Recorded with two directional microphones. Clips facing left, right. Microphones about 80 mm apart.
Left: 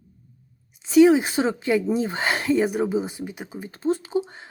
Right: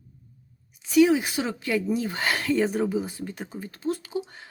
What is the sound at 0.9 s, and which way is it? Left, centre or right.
Speech, left.